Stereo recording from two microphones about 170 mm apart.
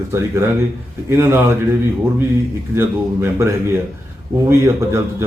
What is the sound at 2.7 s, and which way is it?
Speech, 15° right (ahead or behind).